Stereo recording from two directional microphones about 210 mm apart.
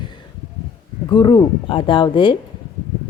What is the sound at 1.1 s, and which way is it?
Speech, 20° left (ahead or behind).